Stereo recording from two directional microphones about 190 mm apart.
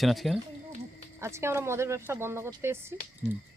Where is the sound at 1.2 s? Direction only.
15° right (ahead or behind).